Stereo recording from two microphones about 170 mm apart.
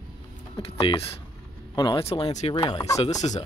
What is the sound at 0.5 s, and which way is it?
Speech, 35° left (ahead or behind).